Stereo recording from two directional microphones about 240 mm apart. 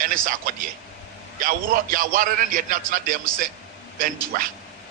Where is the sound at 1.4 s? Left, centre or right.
Right.